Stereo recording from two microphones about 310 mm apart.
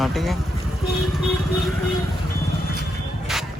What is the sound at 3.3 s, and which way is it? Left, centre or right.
Music, centre.